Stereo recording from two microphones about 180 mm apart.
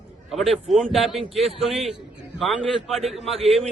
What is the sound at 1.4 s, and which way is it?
Speech, 35° right (ahead or behind).